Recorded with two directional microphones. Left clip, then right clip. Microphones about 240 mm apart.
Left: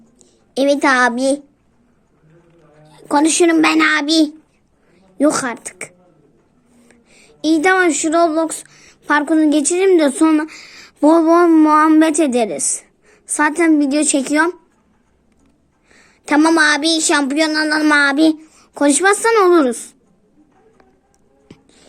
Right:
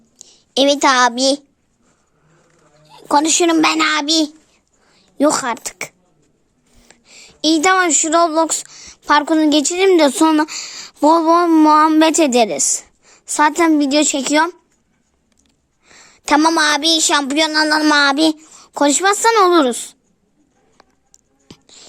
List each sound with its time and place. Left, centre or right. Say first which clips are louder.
0.2 s speech: right 3 dB; right
2.8 s a woman's voice: even; right
15.9 s speech: right 3 dB; right
20.7 s music: right 1 dB; right